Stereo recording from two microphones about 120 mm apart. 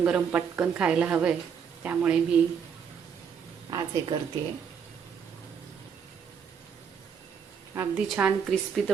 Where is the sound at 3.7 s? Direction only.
35° right (ahead or behind).